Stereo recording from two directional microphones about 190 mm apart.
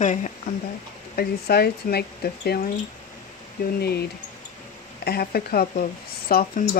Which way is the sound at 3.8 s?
55° left (ahead or behind).